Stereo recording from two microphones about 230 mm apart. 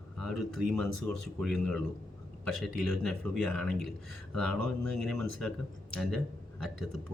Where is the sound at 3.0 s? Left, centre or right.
Centre.